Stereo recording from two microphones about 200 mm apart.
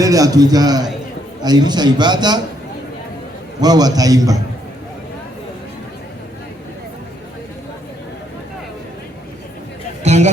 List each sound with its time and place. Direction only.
0.0 s a man's voice: 15° right (ahead or behind)
3.6 s a man's voice: 20° right (ahead or behind)
10.0 s speech: 35° right (ahead or behind)